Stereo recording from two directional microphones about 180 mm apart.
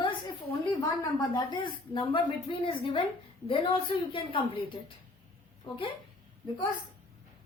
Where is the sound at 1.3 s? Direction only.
20° left (ahead or behind).